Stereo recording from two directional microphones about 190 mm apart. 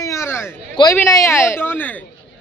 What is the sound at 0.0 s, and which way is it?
Speech, 15° left (ahead or behind).